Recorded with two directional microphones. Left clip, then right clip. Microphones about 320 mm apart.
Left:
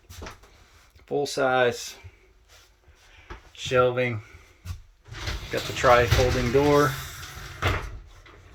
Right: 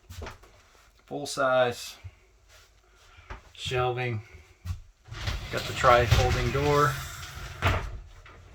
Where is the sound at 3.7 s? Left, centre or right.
Centre.